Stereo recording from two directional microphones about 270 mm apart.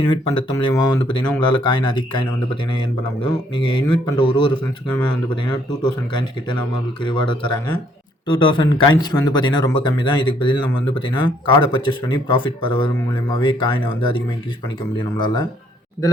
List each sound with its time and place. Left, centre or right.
0.0 s speech: centre